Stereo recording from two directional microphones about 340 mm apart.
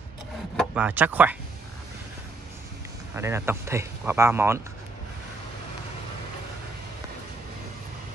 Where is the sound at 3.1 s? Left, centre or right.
Centre.